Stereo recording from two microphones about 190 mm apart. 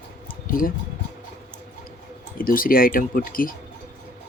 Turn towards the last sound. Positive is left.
turn(degrees=50)  # may be behind; listen again after turning